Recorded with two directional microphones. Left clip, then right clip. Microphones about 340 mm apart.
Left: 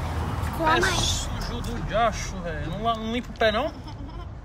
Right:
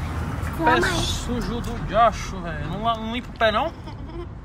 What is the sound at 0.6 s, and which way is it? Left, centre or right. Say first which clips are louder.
Speech: right 2 dB; centre.